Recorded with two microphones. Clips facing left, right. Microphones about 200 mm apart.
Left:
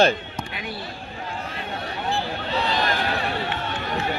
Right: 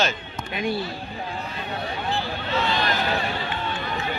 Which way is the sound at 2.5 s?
35° left (ahead or behind).